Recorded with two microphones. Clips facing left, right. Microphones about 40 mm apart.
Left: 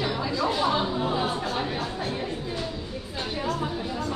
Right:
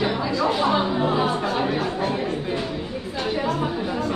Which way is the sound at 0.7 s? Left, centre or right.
Right.